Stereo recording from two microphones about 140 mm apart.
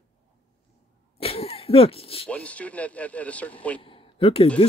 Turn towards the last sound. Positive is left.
turn(degrees=40)  # may be behind; listen again after turning